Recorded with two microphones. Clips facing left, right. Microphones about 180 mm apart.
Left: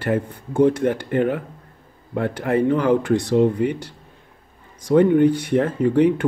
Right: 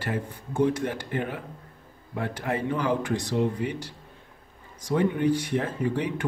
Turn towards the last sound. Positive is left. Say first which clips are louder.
# left 11 dB
turn(degrees=55)  # may be behind; listen again after turning